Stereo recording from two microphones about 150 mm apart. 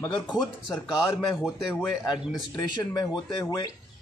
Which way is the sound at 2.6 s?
25° left (ahead or behind).